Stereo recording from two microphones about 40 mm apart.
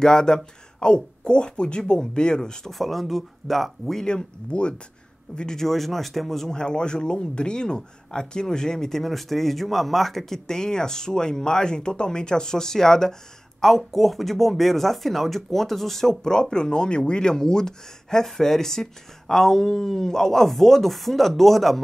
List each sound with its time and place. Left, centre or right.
0.0 s speech: centre
2.7 s speech: centre
4.0 s speech: left
5.6 s speech: centre
6.5 s speech: left; by 10.4 s centre
10.4 s speech: centre
13.6 s speech: centre
16.1 s speech: centre